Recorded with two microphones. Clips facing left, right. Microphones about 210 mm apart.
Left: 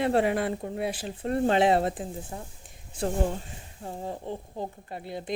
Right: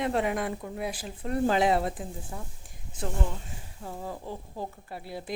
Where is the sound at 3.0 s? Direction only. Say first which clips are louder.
Left 6 dB; 40° left (ahead or behind).